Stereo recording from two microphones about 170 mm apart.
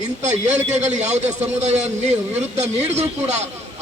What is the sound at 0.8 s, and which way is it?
A man's voice, 40° right (ahead or behind).